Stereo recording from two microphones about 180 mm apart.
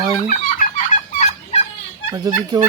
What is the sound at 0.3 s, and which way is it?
Fowl, 45° left (ahead or behind).